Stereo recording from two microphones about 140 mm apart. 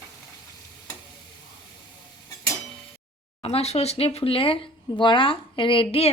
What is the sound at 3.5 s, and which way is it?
Speech, 50° left (ahead or behind).